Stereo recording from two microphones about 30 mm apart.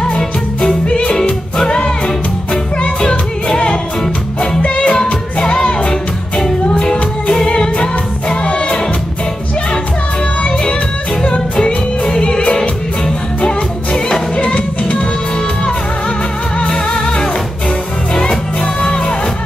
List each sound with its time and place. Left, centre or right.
0.0 s music: centre
0.8 s music: left
3.0 s music: left
4.6 s music: left
5.4 s music: left
7.7 s music: left
10.4 s music: left
16.5 s music: left
18.8 s music: left